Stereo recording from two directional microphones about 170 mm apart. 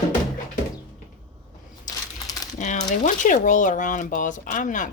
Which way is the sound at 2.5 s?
45° left (ahead or behind).